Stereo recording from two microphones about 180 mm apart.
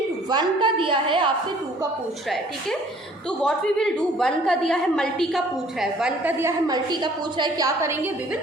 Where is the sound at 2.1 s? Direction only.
Centre (ahead or behind).